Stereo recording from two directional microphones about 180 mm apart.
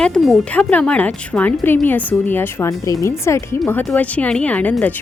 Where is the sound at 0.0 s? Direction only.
Centre (ahead or behind).